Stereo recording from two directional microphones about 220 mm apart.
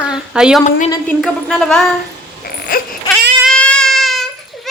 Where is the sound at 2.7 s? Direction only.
40° left (ahead or behind).